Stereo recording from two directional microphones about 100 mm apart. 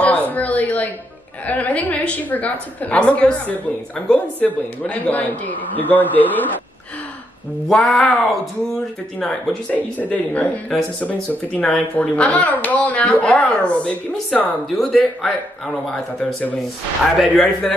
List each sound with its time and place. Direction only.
0.3 s a sound: 15° left (ahead or behind)
1.4 s speech: 15° left (ahead or behind)
7.6 s speech: centre (ahead or behind)
14.8 s speech: centre (ahead or behind)